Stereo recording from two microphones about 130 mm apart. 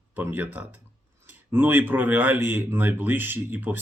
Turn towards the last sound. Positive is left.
turn(degrees=-15)  # may be behind; listen again after turning